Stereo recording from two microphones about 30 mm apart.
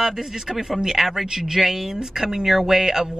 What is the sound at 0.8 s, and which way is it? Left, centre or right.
A man's voice, right.